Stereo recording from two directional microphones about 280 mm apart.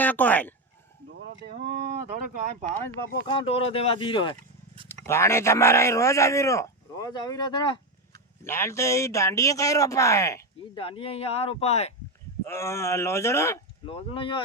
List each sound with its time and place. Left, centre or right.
0.0 s speech: centre
1.5 s speech: right
2.8 s a man's voice: centre
12.5 s a man's voice: centre